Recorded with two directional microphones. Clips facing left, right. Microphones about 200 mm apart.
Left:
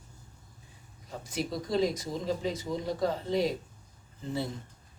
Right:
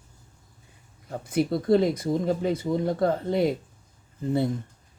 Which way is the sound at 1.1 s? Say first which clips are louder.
Right 9 dB; 55° right (ahead or behind).